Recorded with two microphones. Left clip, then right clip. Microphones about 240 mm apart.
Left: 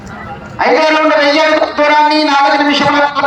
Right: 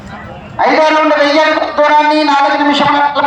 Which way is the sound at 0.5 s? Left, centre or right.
Right.